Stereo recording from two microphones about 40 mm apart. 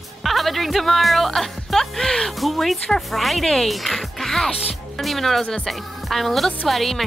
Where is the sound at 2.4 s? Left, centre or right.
Centre.